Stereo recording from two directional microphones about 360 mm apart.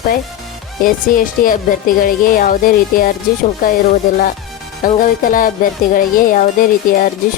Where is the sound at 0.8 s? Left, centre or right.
Left.